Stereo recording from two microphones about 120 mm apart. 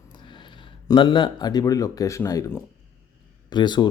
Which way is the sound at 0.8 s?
40° left (ahead or behind).